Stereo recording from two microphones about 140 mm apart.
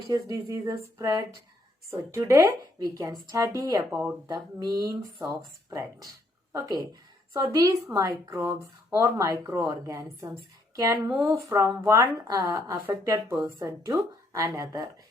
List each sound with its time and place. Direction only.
0.1 s a woman's voice: 25° right (ahead or behind)
6.5 s a woman's voice: 25° right (ahead or behind)